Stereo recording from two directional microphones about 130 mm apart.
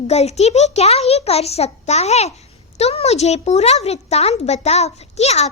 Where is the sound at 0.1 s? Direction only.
55° left (ahead or behind).